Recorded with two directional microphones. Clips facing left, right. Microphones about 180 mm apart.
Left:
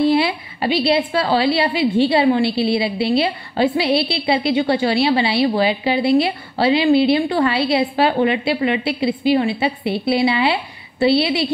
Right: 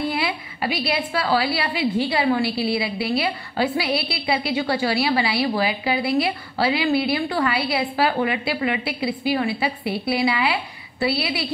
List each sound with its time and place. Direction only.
0.1 s a woman's voice: 30° left (ahead or behind)